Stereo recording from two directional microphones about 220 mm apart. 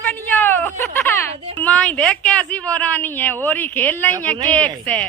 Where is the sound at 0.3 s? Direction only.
10° left (ahead or behind).